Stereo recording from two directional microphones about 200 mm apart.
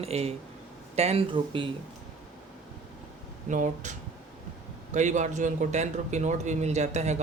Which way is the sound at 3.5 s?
40° right (ahead or behind).